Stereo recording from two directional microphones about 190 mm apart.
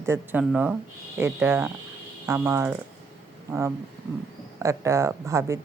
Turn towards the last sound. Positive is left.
turn(degrees=-15)  # may be behind; listen again after turning